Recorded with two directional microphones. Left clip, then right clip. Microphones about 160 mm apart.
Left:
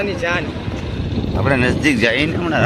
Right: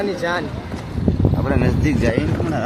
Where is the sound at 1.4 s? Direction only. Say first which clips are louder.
Left 7 dB; 10° left (ahead or behind).